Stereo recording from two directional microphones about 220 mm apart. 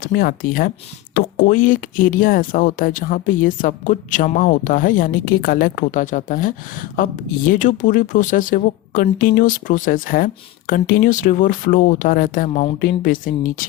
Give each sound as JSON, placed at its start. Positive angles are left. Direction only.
{"t": 0.0, "sound": "speech", "side_deg": 45}